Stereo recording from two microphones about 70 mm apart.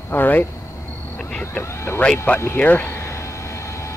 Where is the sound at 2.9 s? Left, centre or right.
Left.